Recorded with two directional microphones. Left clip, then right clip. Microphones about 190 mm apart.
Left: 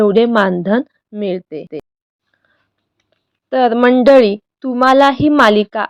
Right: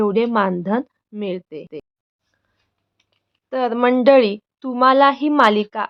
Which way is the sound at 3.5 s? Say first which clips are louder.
Left 6 dB; 25° left (ahead or behind).